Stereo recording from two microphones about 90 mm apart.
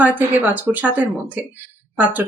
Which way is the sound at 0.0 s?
20° right (ahead or behind).